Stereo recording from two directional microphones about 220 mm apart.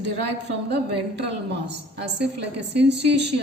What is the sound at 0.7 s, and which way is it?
A woman's voice, 50° right (ahead or behind).